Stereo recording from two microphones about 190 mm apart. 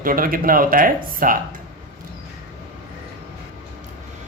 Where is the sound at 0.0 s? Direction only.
50° right (ahead or behind).